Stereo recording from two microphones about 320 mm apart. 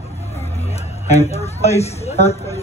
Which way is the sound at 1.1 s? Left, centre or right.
Centre.